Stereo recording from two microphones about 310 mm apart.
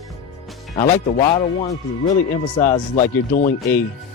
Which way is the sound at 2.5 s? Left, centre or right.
Centre.